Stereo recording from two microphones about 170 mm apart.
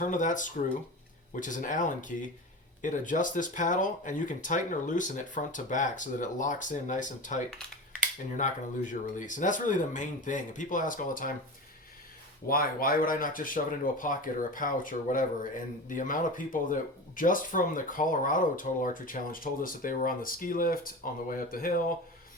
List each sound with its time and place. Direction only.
0.0 s speech: 50° left (ahead or behind)
12.5 s speech: 60° left (ahead or behind)